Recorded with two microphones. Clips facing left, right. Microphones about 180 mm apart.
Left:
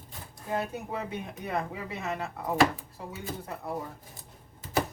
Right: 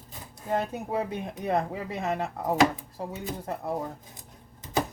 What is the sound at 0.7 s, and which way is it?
Speech, 40° right (ahead or behind).